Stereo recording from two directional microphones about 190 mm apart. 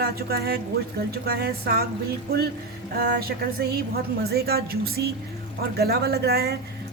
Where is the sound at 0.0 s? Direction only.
55° right (ahead or behind).